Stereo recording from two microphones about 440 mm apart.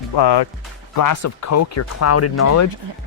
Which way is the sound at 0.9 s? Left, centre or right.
Left.